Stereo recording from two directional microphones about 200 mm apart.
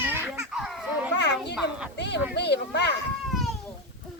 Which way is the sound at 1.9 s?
60° left (ahead or behind).